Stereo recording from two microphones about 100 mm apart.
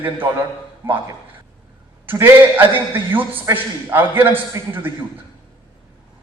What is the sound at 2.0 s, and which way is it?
A man's voice, 20° right (ahead or behind).